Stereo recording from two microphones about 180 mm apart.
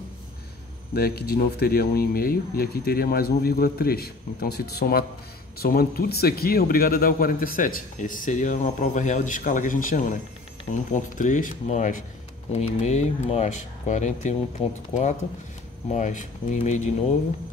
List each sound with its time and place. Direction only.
0.9 s speech: 60° left (ahead or behind); by 14.7 s 35° left (ahead or behind)
15.9 s speech: 45° left (ahead or behind)